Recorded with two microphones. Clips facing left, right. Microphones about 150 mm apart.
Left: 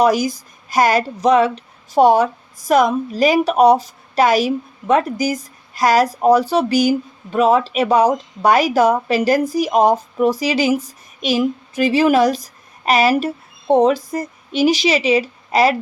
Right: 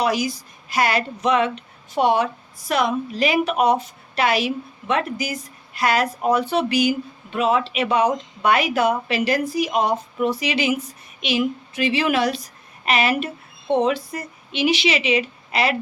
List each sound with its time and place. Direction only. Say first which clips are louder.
0.0 s speech: left 6 dB; 45° left (ahead or behind)